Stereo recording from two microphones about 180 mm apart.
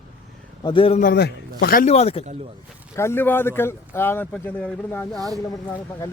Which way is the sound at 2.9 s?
15° left (ahead or behind).